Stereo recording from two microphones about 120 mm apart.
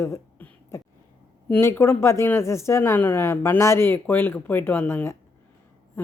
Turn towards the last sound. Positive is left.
turn(degrees=15)  # may be behind; listen again after turning